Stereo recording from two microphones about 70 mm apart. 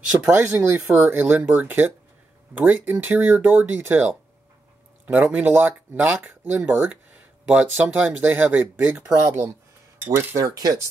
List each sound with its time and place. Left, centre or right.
0.6 s speech: right
9.1 s speech: right
10.3 s speech: right